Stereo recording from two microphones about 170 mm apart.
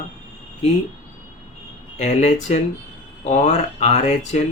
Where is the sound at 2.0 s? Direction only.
45° left (ahead or behind).